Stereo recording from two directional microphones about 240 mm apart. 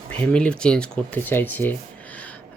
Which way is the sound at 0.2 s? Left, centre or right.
Centre.